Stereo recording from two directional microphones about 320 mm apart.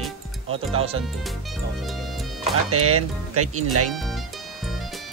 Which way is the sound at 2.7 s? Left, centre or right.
Right.